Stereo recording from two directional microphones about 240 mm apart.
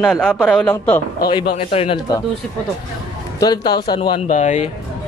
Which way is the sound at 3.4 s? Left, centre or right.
Centre.